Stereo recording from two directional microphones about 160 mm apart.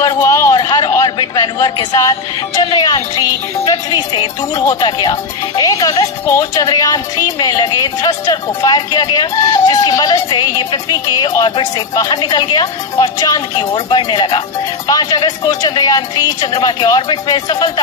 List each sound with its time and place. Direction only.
0.0 s a man's voice: 20° left (ahead or behind)